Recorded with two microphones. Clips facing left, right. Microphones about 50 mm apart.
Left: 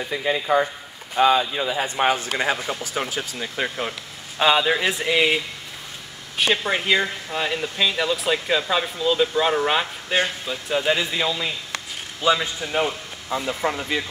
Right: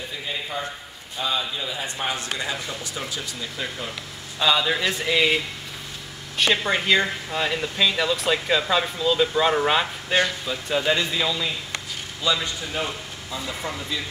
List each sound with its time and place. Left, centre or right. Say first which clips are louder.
0.1 s speech: left 13 dB; left
1.1 s speech: left 10 dB; left
1.6 s a man's voice: left 7 dB; left; by 11.5 s centre
12.2 s a man's voice: left 4 dB; left
13.6 s speech: left 6 dB; left